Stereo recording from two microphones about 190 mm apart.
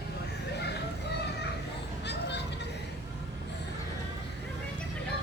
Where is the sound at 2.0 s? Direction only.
65° left (ahead or behind).